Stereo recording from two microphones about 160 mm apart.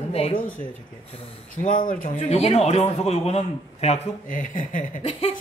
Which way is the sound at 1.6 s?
55° left (ahead or behind).